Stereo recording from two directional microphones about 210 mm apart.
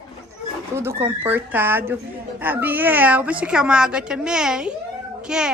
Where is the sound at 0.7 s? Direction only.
10° right (ahead or behind).